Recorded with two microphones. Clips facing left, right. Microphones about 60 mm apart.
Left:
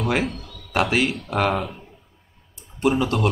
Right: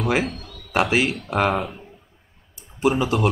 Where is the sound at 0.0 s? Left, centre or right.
Centre.